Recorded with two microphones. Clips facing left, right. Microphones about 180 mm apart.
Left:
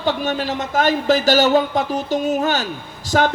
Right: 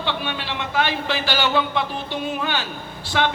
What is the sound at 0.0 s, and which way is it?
A man's voice, 40° left (ahead or behind).